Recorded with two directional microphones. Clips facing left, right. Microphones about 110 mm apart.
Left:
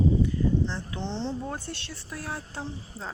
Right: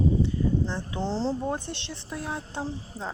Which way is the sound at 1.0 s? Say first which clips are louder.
Right 5 dB; 35° right (ahead or behind).